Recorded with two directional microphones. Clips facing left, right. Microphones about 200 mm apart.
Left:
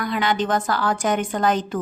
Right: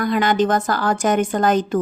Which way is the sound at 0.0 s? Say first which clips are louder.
Right 5 dB; 45° right (ahead or behind).